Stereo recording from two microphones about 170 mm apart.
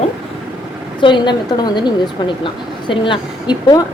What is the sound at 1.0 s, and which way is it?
A woman's voice, 25° left (ahead or behind).